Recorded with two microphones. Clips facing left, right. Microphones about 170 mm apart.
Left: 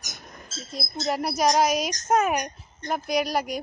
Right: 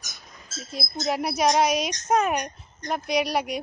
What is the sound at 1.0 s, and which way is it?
A woman's voice, centre (ahead or behind).